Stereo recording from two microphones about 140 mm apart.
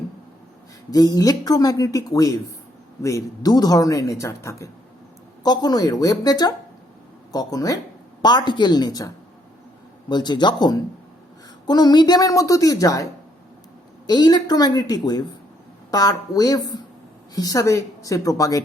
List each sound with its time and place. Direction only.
0.9 s a man's voice: 25° left (ahead or behind)
14.1 s speech: 30° left (ahead or behind)